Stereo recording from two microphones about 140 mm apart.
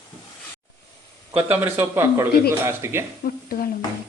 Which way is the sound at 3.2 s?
90° left.